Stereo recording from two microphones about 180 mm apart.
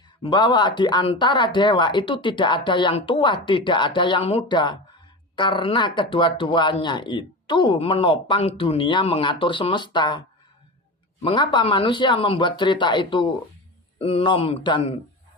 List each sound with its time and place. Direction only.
0.2 s a man's voice: 25° left (ahead or behind)